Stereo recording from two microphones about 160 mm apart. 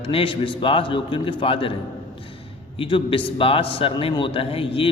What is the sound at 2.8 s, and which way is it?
A man's voice, 30° left (ahead or behind).